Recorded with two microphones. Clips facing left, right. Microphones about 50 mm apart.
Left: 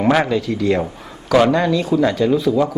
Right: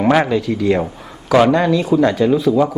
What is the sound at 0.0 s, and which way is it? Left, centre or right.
Speech, centre.